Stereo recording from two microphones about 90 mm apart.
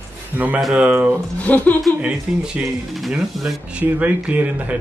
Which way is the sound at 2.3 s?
10° right (ahead or behind).